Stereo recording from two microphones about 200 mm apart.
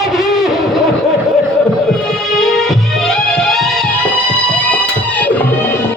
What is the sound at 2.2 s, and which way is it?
Music, centre (ahead or behind).